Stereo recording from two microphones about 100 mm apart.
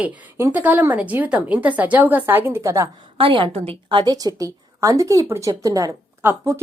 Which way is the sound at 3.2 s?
60° right (ahead or behind).